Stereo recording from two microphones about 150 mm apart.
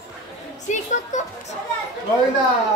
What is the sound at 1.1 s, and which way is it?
Speech, 55° left (ahead or behind).